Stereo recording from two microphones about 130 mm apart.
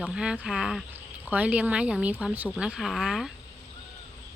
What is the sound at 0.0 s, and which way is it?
Speech, 5° right (ahead or behind).